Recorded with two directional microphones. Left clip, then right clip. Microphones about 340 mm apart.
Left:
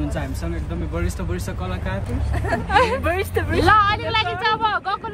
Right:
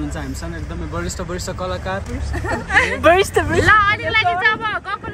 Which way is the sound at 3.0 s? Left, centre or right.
Centre.